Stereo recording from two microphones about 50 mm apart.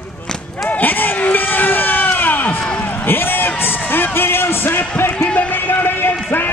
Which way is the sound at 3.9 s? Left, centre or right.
Left.